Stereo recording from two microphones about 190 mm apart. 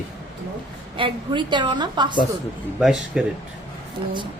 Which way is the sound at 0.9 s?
25° right (ahead or behind).